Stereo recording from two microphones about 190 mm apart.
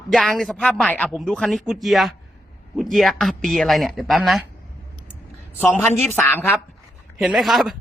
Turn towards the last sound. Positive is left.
turn(degrees=0)  # may be behind; listen again after turning